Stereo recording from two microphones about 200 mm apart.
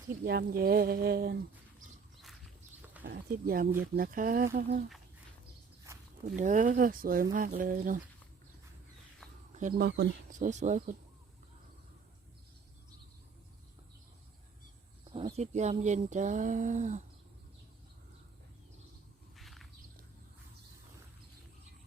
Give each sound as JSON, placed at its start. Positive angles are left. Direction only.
{"t": 0.3, "sound": "speech", "side_deg": -50}
{"t": 3.0, "sound": "speech", "side_deg": -50}
{"t": 5.9, "sound": "walk", "side_deg": -15}
{"t": 6.2, "sound": "speech", "side_deg": -40}
{"t": 9.5, "sound": "speech", "side_deg": -40}
{"t": 15.1, "sound": "speech", "side_deg": -30}
{"t": 19.4, "sound": "a sound", "side_deg": 0}